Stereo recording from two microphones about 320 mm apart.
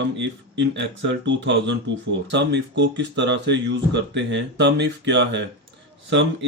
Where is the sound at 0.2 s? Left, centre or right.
Right.